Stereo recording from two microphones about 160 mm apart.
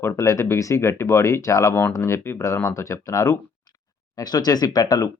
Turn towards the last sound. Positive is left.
turn(degrees=25)  # may be behind; listen again after turning